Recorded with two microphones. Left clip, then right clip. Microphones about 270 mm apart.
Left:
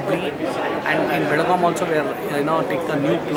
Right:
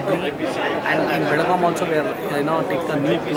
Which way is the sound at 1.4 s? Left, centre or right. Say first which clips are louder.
Left 1 dB; centre.